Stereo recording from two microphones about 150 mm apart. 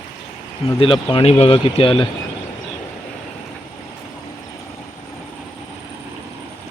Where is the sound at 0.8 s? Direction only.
35° left (ahead or behind).